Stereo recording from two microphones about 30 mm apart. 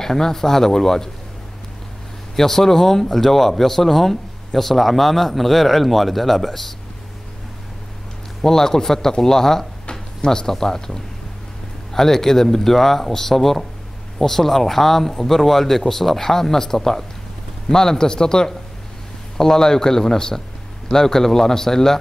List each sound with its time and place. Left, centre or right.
0.0 s speech: centre
2.3 s speech: centre
8.4 s a man's voice: centre